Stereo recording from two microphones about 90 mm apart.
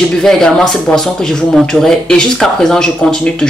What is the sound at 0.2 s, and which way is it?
Speech, 5° left (ahead or behind).